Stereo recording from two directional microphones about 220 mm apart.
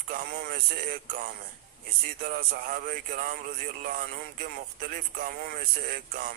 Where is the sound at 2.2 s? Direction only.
40° right (ahead or behind).